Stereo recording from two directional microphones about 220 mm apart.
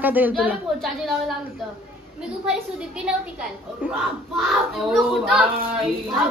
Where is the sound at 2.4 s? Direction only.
5° right (ahead or behind).